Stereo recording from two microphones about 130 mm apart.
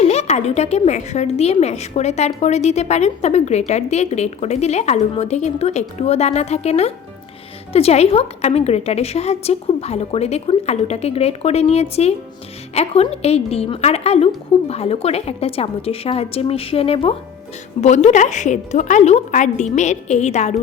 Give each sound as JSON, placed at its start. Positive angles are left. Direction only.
{"t": 0.0, "sound": "a woman's voice", "side_deg": 55}
{"t": 17.7, "sound": "a woman's voice", "side_deg": 60}